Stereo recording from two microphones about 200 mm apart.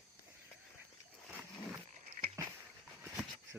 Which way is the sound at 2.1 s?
35° right (ahead or behind).